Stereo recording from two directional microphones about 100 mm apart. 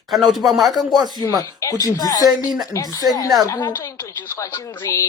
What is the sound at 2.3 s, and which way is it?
Speech, 5° right (ahead or behind).